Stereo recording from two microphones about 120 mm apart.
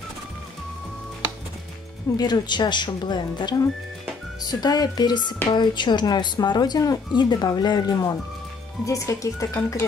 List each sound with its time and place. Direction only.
2.1 s speech: 35° left (ahead or behind)